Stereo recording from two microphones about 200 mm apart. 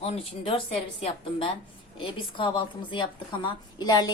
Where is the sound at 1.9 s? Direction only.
25° left (ahead or behind).